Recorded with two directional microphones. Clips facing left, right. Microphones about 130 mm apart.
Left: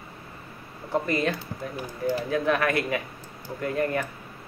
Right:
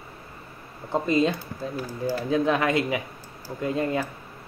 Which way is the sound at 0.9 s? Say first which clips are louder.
Right 3 dB; 20° right (ahead or behind).